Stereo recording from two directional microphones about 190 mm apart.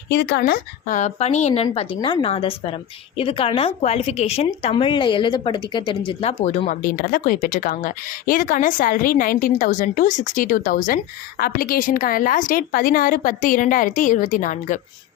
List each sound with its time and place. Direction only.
0.1 s a woman's voice: 55° left (ahead or behind); by 6.3 s 25° left (ahead or behind)
6.4 s speech: 40° left (ahead or behind)